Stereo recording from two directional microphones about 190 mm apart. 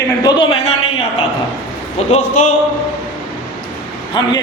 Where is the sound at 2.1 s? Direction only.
35° left (ahead or behind).